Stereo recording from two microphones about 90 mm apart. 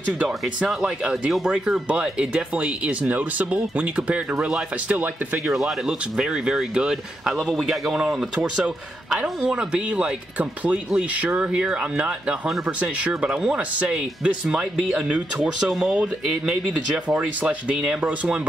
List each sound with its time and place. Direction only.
0.7 s speech: 10° right (ahead or behind)
5.5 s speech: centre (ahead or behind)